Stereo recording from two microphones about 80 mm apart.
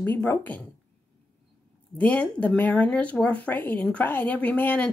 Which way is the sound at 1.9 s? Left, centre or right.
Centre.